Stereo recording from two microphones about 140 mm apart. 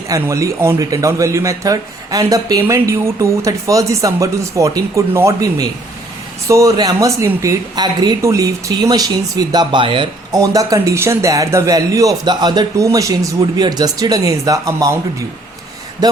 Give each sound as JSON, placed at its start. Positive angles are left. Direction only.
{"t": 0.1, "sound": "a man's voice", "side_deg": -25}
{"t": 10.3, "sound": "a man's voice", "side_deg": -25}